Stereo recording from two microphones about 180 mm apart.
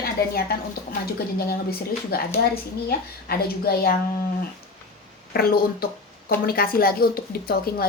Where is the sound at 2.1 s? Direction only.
60° left (ahead or behind).